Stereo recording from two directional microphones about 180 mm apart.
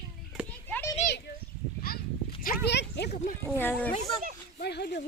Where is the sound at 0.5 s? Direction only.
10° left (ahead or behind).